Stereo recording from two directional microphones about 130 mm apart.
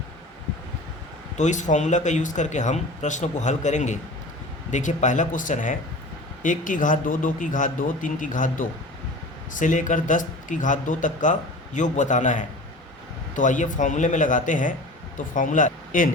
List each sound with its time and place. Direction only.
1.4 s a man's voice: 70° left (ahead or behind); by 8.6 s 90° left
9.5 s a man's voice: 80° left